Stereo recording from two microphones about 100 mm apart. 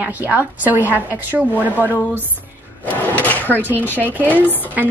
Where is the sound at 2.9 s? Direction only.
15° left (ahead or behind).